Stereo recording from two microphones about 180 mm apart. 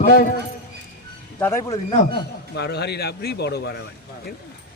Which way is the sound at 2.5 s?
65° left (ahead or behind).